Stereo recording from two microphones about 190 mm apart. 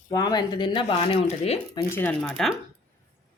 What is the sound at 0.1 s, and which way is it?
Speech, 20° left (ahead or behind).